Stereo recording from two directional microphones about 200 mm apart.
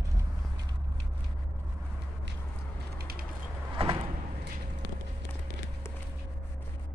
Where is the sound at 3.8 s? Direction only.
30° right (ahead or behind).